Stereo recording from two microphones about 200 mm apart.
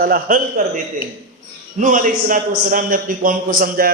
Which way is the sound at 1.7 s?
40° right (ahead or behind).